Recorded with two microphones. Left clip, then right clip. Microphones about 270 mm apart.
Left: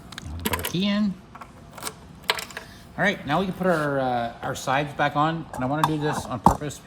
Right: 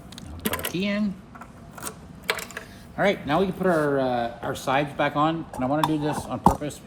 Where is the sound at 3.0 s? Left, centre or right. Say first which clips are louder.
Right 1 dB; left.